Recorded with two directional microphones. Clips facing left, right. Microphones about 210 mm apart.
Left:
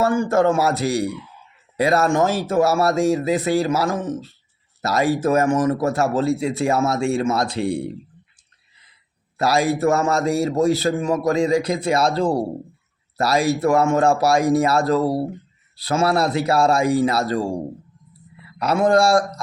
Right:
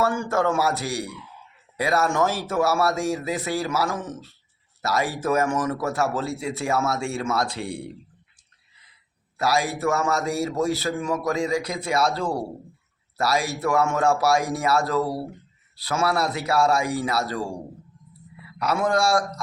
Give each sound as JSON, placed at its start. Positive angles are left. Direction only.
{"t": 0.0, "sound": "speech", "side_deg": 20}
{"t": 9.4, "sound": "speech", "side_deg": 25}
{"t": 18.6, "sound": "speech", "side_deg": 25}